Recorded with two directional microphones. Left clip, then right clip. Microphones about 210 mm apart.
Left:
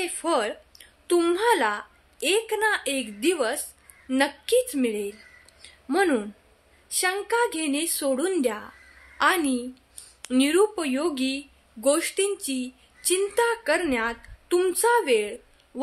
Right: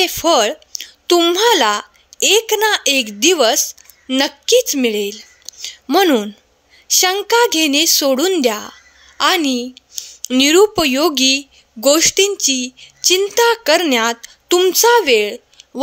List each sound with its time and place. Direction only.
0.0 s a woman's voice: 45° right (ahead or behind)